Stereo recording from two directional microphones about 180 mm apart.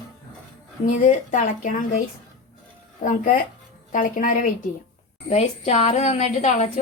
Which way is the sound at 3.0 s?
50° left (ahead or behind).